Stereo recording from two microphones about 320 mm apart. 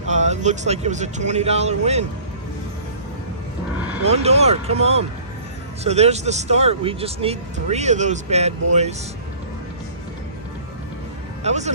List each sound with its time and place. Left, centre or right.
0.1 s speech: right
4.0 s speech: centre
11.4 s speech: right